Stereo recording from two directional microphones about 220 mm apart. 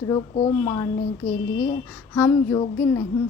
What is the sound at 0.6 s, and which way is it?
Speech, 15° left (ahead or behind).